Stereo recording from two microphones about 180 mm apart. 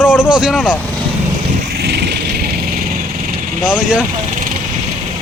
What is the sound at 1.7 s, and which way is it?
Vehicle, 65° right (ahead or behind).